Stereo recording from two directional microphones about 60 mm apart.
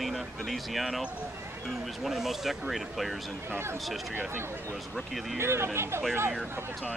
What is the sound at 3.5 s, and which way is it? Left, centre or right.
Speech, right.